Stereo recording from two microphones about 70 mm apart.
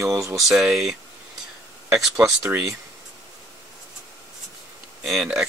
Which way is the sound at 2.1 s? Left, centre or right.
Right.